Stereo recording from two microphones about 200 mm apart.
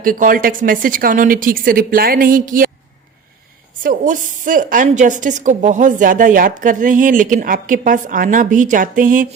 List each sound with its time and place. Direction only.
0.0 s a woman's voice: 45° right (ahead or behind)
3.8 s a woman's voice: 40° right (ahead or behind)